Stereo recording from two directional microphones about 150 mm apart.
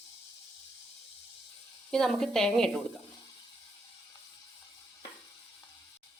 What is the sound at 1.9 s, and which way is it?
Speech, 5° left (ahead or behind).